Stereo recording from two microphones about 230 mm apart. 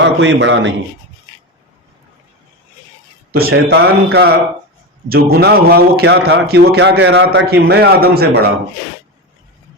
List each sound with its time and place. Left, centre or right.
0.0 s a man's voice: right
3.3 s a man's voice: right